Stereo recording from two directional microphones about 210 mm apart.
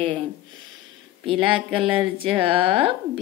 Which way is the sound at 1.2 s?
25° right (ahead or behind).